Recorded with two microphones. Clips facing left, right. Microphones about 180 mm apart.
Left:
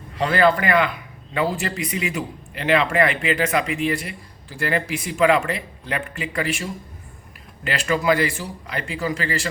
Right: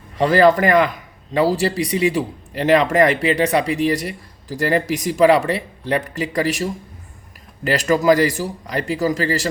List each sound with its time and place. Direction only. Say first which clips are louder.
0.2 s speech: right 5 dB; 40° right (ahead or behind)